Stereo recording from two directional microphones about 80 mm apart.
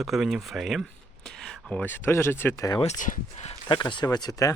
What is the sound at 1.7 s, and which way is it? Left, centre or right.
Speech, left.